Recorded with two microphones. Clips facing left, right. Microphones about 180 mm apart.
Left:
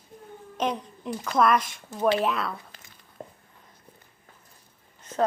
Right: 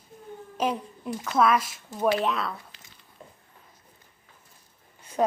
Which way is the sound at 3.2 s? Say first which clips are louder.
Left 7 dB; 45° left (ahead or behind).